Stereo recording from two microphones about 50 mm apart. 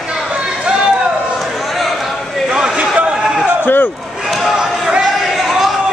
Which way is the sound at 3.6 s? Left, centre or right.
Left.